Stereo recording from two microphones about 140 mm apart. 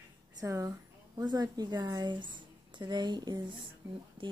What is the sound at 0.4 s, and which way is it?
A woman's voice, 25° right (ahead or behind).